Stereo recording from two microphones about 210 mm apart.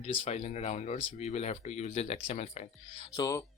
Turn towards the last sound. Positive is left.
turn(degrees=20)  # may be behind; listen again after turning